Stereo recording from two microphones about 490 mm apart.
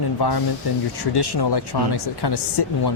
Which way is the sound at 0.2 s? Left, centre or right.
Left.